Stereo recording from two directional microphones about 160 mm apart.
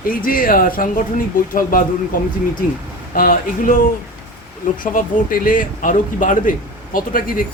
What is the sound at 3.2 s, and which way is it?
Speech, 65° left (ahead or behind).